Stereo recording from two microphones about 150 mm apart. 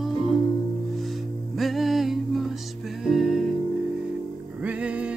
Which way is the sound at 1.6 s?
Centre (ahead or behind).